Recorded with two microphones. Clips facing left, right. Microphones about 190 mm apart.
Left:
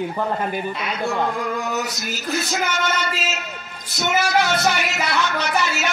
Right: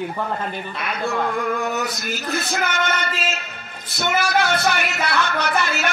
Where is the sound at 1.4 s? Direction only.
55° right (ahead or behind).